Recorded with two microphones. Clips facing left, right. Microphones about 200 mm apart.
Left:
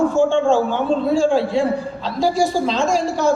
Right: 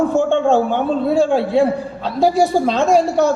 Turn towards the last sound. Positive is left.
turn(degrees=-60)  # may be behind; listen again after turning